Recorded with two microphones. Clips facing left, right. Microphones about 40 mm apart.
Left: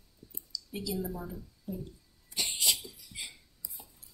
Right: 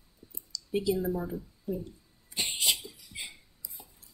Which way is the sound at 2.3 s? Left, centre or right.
Right.